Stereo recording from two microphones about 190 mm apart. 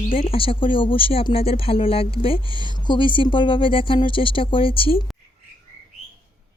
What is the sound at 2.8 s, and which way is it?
Speech, 25° left (ahead or behind).